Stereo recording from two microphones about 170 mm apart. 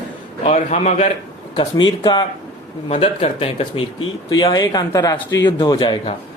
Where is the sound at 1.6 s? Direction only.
25° left (ahead or behind).